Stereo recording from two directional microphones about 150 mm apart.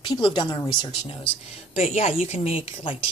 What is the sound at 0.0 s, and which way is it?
A woman's voice, 30° left (ahead or behind).